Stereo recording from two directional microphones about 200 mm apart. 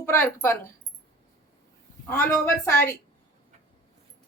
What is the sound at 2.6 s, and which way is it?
Speech, 15° left (ahead or behind).